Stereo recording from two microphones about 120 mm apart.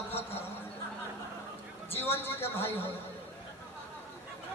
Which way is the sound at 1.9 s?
20° left (ahead or behind).